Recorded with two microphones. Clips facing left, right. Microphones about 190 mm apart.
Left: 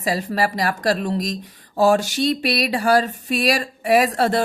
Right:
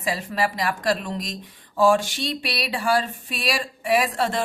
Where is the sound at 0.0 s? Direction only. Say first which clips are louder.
Left 4 dB; 40° left (ahead or behind).